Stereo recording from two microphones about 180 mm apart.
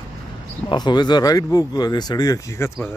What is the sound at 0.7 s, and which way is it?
Speech, 25° left (ahead or behind).